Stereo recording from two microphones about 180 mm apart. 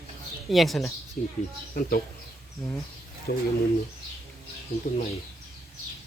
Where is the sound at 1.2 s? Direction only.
55° left (ahead or behind).